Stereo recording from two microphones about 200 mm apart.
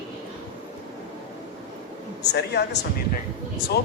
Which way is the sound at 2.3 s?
55° left (ahead or behind).